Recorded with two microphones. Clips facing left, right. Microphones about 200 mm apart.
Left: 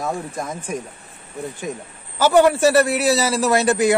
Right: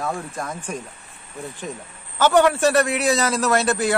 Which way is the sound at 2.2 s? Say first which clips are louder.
Left 2 dB; 10° left (ahead or behind).